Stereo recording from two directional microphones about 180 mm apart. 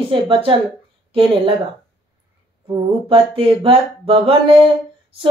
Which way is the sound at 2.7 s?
30° right (ahead or behind).